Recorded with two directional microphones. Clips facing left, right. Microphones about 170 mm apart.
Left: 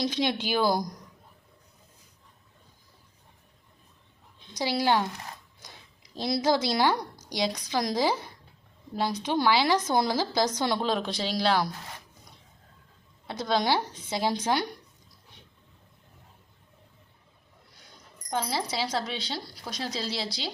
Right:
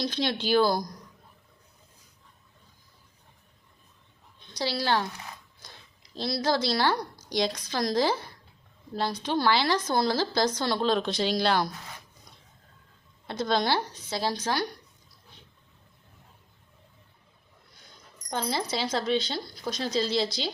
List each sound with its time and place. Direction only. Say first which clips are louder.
0.1 s a woman's voice: right 2 dB; 15° left (ahead or behind)
4.5 s a woman's voice: left 2 dB; 15° left (ahead or behind)
6.1 s a woman's voice: left 2 dB; 15° left (ahead or behind)
9.2 s a woman's voice: left 1 dB; 15° left (ahead or behind)
13.2 s a woman's voice: even; 10° left (ahead or behind)
18.3 s speech: even; 5° left (ahead or behind)